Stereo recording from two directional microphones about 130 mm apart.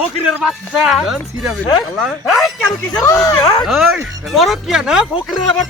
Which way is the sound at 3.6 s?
Centre (ahead or behind).